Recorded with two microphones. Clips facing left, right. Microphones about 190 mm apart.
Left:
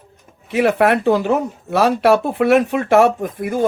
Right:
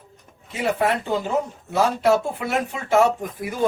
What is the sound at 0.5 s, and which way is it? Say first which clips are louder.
Speech: left 7 dB; 70° left (ahead or behind).